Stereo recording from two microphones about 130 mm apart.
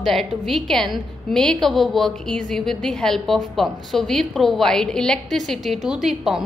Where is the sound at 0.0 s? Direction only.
Centre (ahead or behind).